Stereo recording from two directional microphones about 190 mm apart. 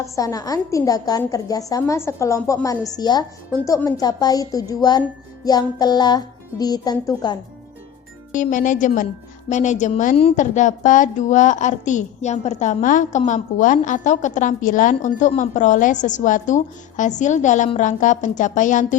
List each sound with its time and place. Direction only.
0.0 s a woman's voice: 20° left (ahead or behind)
8.3 s a woman's voice: 40° left (ahead or behind)